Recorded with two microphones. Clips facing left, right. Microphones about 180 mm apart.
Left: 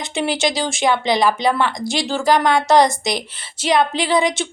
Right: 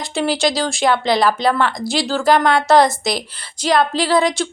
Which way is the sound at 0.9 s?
15° left (ahead or behind).